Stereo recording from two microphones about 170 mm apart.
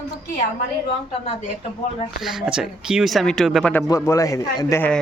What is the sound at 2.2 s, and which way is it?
Speech, centre (ahead or behind).